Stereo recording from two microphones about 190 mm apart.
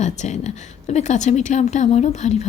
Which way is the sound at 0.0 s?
40° left (ahead or behind).